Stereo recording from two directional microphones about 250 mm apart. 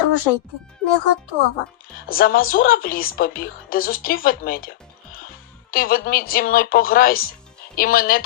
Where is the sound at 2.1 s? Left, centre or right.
Left.